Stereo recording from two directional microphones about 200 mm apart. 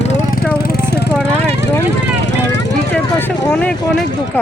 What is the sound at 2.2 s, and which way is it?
Vehicle, 60° left (ahead or behind).